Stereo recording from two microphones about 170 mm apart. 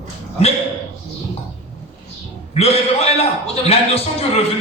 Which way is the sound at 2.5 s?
35° left (ahead or behind).